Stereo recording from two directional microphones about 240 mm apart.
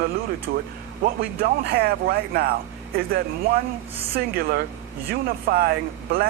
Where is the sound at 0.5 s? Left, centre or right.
Right.